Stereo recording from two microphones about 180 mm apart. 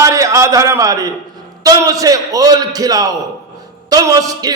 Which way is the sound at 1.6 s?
20° right (ahead or behind).